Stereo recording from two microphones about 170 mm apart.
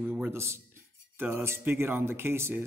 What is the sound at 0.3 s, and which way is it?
A man's voice, 15° right (ahead or behind).